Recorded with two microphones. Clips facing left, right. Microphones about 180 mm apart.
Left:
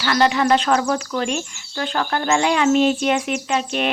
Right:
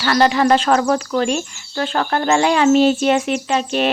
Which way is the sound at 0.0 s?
35° right (ahead or behind).